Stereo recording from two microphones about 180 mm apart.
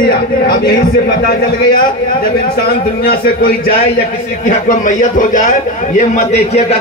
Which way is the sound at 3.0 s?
55° left (ahead or behind).